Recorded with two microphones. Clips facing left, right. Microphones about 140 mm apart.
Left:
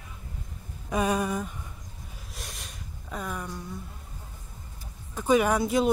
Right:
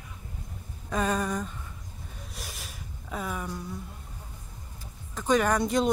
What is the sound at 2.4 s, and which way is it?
Gasp, centre (ahead or behind).